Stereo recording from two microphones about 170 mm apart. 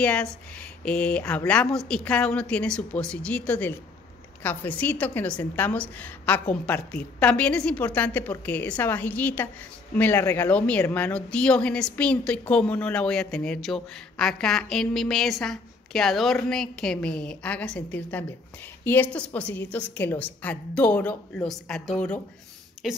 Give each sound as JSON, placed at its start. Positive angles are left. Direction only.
{"t": 0.0, "sound": "a woman's voice", "side_deg": 5}